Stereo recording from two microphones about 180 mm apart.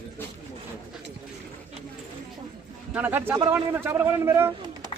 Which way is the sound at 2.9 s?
10° right (ahead or behind).